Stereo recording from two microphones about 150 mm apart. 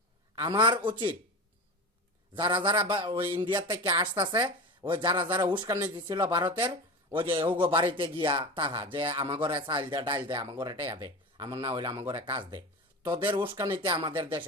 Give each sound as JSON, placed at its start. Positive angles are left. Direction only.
{"t": 0.3, "sound": "a woman's voice", "side_deg": -30}
{"t": 2.3, "sound": "a woman's voice", "side_deg": -35}